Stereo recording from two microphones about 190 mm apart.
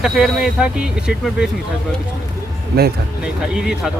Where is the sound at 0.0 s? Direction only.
5° right (ahead or behind).